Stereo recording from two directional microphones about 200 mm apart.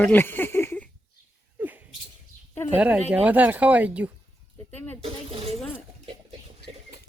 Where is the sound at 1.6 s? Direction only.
10° right (ahead or behind).